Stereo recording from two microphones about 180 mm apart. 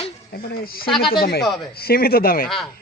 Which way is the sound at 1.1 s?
60° left (ahead or behind).